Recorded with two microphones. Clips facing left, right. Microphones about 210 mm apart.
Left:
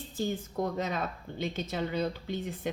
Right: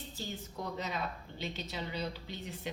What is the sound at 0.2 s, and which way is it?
A woman's voice, 50° left (ahead or behind).